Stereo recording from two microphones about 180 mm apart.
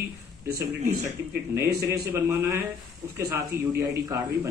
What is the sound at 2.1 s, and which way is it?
Speech, 15° right (ahead or behind).